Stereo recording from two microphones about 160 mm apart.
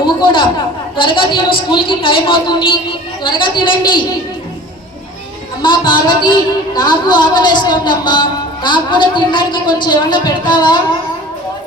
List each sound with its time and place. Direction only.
0.0 s a sound: 30° left (ahead or behind)
0.9 s a woman's voice: 30° left (ahead or behind)
5.6 s a man's voice: 30° left (ahead or behind)